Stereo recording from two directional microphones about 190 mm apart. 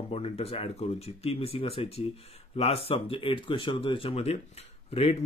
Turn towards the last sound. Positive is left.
turn(degrees=30)  # may be behind; listen again after turning